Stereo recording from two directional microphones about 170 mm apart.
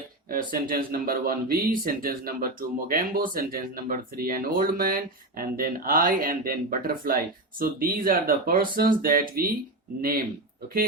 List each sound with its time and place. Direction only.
0.3 s speech: 55° right (ahead or behind)